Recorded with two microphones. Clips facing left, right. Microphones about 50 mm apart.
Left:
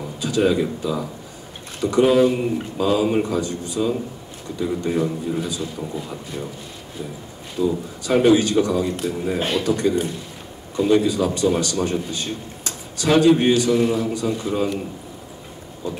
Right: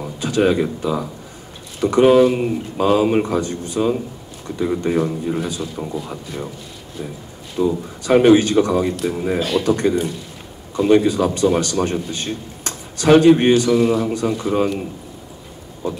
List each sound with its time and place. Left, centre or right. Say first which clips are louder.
0.2 s a man's voice: right 2 dB; right
7.5 s a man's voice: right 2 dB; right
9.4 s a man's voice: right 2 dB; left
9.7 s a man's voice: right 2 dB; right